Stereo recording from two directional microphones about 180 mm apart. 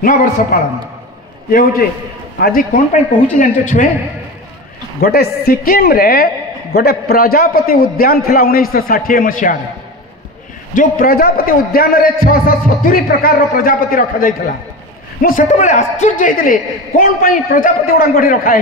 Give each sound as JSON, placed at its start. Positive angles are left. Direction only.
{"t": 0.5, "sound": "a man's voice", "side_deg": 50}
{"t": 2.4, "sound": "a man's voice", "side_deg": 50}
{"t": 5.0, "sound": "a woman's voice", "side_deg": 60}
{"t": 10.7, "sound": "a man's voice", "side_deg": 50}